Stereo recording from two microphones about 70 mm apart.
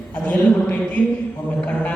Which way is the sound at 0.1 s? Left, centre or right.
Left.